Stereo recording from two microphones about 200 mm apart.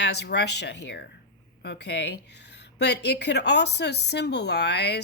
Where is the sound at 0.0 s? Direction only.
55° left (ahead or behind).